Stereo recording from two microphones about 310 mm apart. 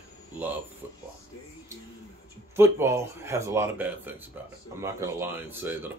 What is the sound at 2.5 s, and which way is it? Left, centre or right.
Speech, centre.